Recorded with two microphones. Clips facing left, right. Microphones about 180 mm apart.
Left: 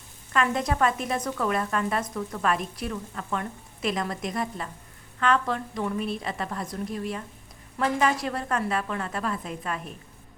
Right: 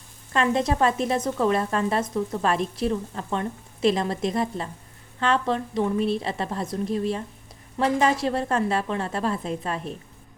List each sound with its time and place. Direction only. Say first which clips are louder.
0.3 s a woman's voice: right 3 dB; 25° right (ahead or behind)